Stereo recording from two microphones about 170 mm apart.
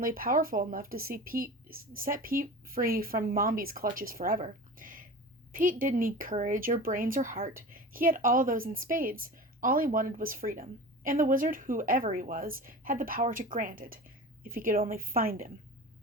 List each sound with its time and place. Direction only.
0.0 s speech: 60° right (ahead or behind)
4.8 s a sound: 55° right (ahead or behind)
5.5 s speech: 55° right (ahead or behind)